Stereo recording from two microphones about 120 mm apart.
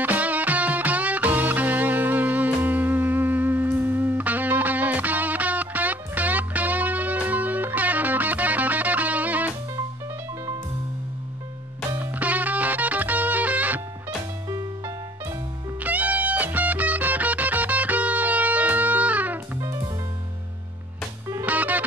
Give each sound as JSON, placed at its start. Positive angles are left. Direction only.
{"t": 0.0, "sound": "music", "side_deg": -15}
{"t": 11.9, "sound": "music", "side_deg": -15}
{"t": 15.8, "sound": "music", "side_deg": -15}
{"t": 21.3, "sound": "music", "side_deg": -15}